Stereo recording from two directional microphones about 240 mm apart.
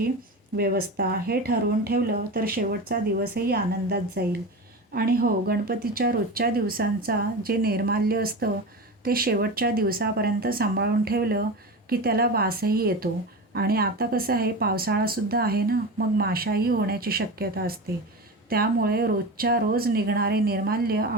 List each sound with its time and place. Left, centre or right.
0.5 s speech: right